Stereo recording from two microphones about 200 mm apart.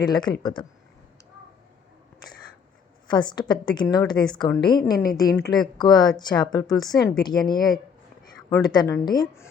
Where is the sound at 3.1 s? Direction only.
20° left (ahead or behind).